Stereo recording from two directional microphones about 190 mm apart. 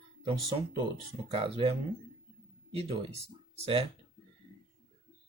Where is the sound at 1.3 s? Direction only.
30° right (ahead or behind).